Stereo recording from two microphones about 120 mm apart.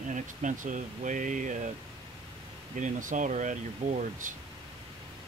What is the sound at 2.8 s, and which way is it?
Speech, 90° right.